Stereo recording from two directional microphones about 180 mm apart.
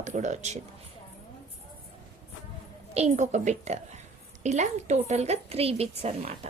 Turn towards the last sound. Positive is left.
turn(degrees=-35)  # may be behind; listen again after turning